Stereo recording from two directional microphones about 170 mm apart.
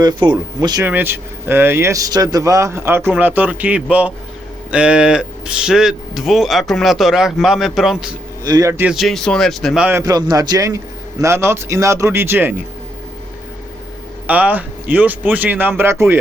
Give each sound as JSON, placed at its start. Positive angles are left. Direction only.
{"t": 0.0, "sound": "speech", "side_deg": -25}
{"t": 0.9, "sound": "speech", "side_deg": -10}
{"t": 8.4, "sound": "speech", "side_deg": -20}
{"t": 8.8, "sound": "speech", "side_deg": 0}
{"t": 10.0, "sound": "speech", "side_deg": -20}
{"t": 14.3, "sound": "speech", "side_deg": -10}